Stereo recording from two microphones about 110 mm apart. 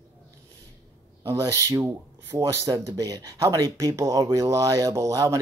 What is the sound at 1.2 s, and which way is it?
Speech, 25° right (ahead or behind).